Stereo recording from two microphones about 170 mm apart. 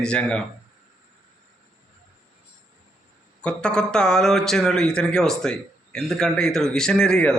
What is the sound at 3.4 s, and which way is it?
A man's voice, 5° left (ahead or behind).